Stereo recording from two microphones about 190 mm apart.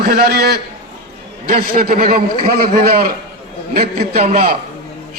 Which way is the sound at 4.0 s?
35° right (ahead or behind).